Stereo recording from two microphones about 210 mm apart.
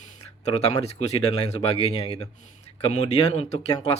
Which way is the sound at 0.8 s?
30° left (ahead or behind).